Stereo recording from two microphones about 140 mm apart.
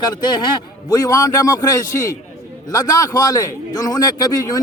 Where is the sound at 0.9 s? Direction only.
25° left (ahead or behind).